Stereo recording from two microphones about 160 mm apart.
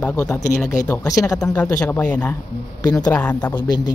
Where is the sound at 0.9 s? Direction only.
20° left (ahead or behind).